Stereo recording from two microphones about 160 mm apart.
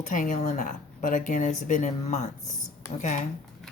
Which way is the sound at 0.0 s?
50° left (ahead or behind).